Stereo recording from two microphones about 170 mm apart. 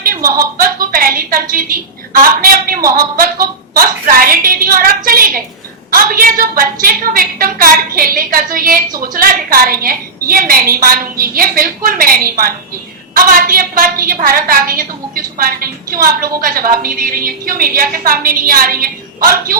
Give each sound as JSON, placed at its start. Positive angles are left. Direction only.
{"t": 0.3, "sound": "a woman's voice", "side_deg": -60}